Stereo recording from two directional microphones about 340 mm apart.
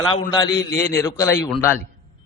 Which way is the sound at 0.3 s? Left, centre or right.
Centre.